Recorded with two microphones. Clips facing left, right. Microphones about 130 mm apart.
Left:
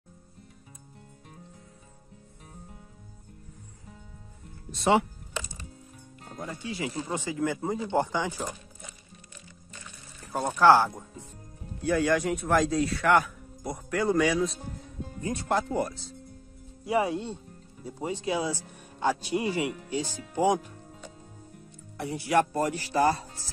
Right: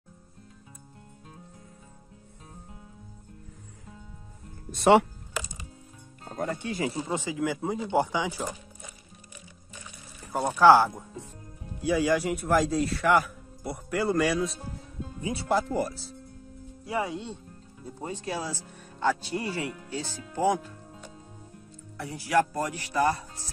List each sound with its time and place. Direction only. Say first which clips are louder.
4.6 s speech: right 4 dB; 60° right (ahead or behind)
6.3 s speech: right 5 dB; 60° right (ahead or behind)
7.0 s speech: right 1 dB; 15° right (ahead or behind)
8.0 s speech: right 1 dB; 15° right (ahead or behind)
9.8 s music: right 1 dB; 10° right (ahead or behind)
11.8 s speech: even; 5° right (ahead or behind)
16.8 s speech: left 4 dB; 20° left (ahead or behind)
18.2 s speech: left 5 dB; 20° left (ahead or behind)
21.9 s speech: even; 20° left (ahead or behind)